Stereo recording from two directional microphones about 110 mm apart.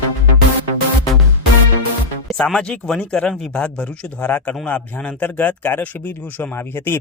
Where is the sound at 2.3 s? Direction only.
5° left (ahead or behind).